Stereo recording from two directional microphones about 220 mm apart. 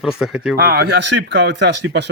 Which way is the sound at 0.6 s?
45° right (ahead or behind).